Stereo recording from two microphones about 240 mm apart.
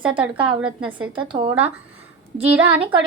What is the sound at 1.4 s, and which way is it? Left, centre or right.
Speech, right.